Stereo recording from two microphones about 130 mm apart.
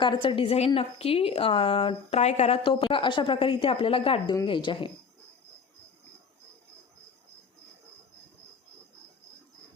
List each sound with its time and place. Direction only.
0.0 s a woman's voice: 40° left (ahead or behind); by 2.6 s 55° left (ahead or behind)
2.6 s a woman's voice: 40° left (ahead or behind)